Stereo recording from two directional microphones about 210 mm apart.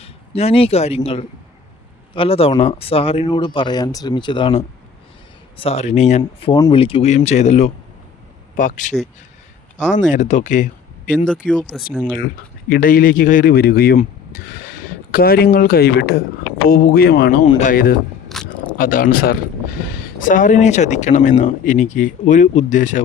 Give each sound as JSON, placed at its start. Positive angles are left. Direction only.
{"t": 0.0, "sound": "speech", "side_deg": 30}
{"t": 10.1, "sound": "speech", "side_deg": 35}
{"t": 11.3, "sound": "speech", "side_deg": 0}
{"t": 12.2, "sound": "speech", "side_deg": 45}
{"t": 17.4, "sound": "speech", "side_deg": 35}
{"t": 18.3, "sound": "a sound", "side_deg": 5}
{"t": 18.8, "sound": "speech", "side_deg": 40}